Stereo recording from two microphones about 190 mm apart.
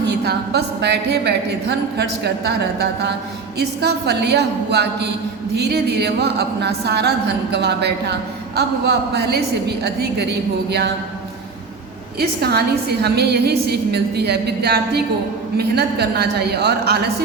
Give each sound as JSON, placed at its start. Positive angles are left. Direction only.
{"t": 0.0, "sound": "a woman's voice", "side_deg": -60}
{"t": 12.4, "sound": "a woman's voice", "side_deg": -60}